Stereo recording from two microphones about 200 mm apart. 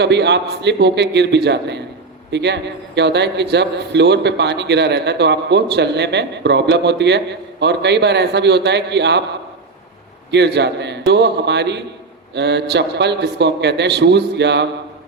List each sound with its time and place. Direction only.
0.0 s a man's voice: 60° right (ahead or behind)
10.3 s a man's voice: 60° right (ahead or behind)